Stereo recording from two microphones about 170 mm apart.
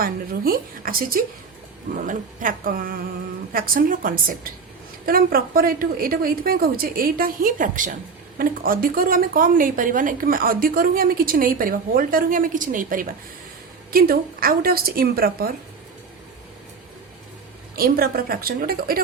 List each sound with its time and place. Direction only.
0.0 s a woman's voice: 60° right (ahead or behind)
17.7 s a woman's voice: 60° right (ahead or behind)